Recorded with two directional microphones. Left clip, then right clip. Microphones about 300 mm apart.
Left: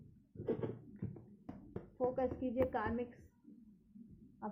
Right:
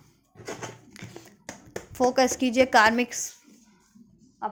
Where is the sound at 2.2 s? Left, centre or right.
Right.